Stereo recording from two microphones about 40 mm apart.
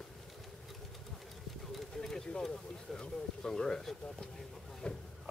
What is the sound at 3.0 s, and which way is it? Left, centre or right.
Speech, centre.